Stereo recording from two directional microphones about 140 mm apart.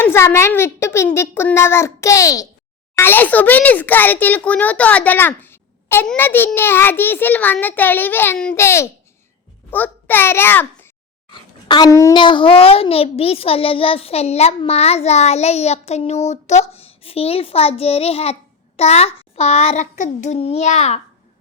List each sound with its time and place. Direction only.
0.0 s a child's voice: 15° left (ahead or behind)
11.7 s speech: 25° left (ahead or behind)
12.1 s a child's voice: 35° left (ahead or behind); by 21.0 s 55° left (ahead or behind)